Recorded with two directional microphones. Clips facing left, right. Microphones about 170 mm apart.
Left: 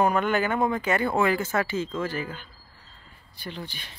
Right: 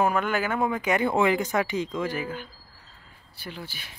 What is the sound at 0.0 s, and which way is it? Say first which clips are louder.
Speech: left 2 dB; 5° right (ahead or behind).